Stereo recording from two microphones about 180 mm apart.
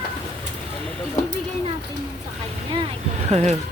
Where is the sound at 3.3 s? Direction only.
35° right (ahead or behind).